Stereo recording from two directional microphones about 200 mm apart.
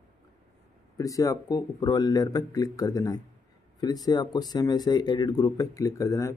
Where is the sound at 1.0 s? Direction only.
15° left (ahead or behind).